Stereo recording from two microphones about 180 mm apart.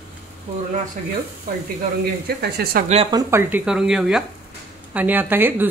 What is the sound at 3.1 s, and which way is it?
A woman's voice, 15° right (ahead or behind).